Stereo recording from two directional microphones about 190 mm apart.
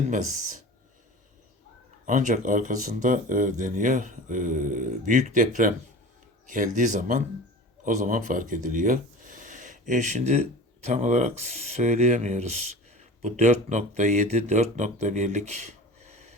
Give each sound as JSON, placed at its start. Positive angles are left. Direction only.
{"t": 0.1, "sound": "speech", "side_deg": -40}
{"t": 2.0, "sound": "speech", "side_deg": -40}